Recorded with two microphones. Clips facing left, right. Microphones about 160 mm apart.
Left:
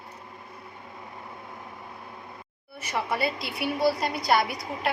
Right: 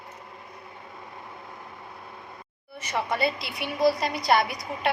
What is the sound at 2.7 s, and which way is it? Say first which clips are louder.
A woman's voice: right 1 dB; 5° left (ahead or behind).